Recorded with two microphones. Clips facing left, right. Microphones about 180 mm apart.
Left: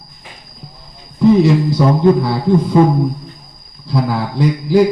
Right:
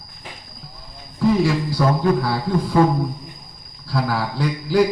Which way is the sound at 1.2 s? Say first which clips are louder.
Left 7 dB; 20° left (ahead or behind).